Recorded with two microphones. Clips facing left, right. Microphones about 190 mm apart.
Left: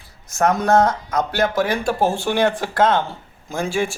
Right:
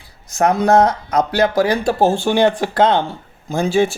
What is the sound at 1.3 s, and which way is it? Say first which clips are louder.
A man's voice: right 4 dB; 35° right (ahead or behind).